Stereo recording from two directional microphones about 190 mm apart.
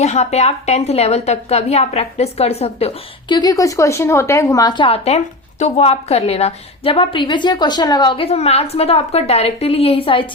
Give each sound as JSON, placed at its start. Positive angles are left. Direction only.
{"t": 0.0, "sound": "a woman's voice", "side_deg": 35}